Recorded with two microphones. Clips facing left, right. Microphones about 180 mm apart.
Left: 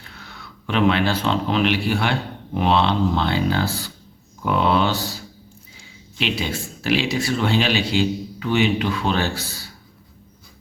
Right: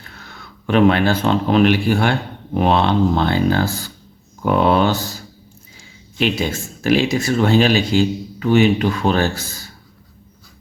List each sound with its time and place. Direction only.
0.0 s speech: 45° right (ahead or behind)